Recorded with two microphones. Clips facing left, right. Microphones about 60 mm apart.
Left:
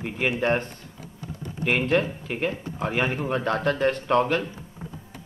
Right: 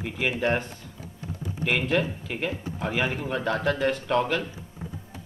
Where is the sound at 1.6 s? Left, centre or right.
Left.